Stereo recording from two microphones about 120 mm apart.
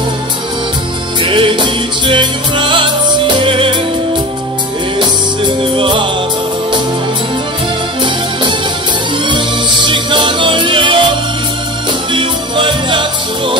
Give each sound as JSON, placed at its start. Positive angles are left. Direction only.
{"t": 1.2, "sound": "music", "side_deg": -45}
{"t": 4.9, "sound": "music", "side_deg": -45}
{"t": 8.0, "sound": "music", "side_deg": -40}
{"t": 12.1, "sound": "music", "side_deg": -45}